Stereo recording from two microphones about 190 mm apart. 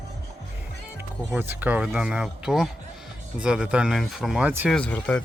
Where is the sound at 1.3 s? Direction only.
10° right (ahead or behind).